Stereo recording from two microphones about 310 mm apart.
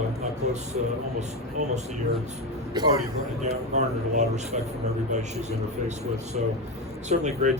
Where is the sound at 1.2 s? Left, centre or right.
Right.